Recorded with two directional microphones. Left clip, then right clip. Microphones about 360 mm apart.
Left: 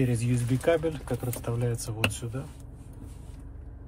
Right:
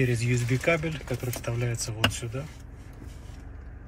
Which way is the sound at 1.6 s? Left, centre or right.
Left.